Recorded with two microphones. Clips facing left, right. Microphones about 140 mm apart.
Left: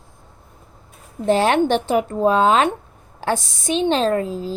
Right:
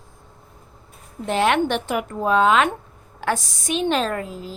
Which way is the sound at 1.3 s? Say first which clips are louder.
Left 4 dB; 35° left (ahead or behind).